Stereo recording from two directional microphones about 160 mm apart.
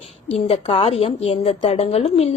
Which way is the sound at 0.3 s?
35° left (ahead or behind).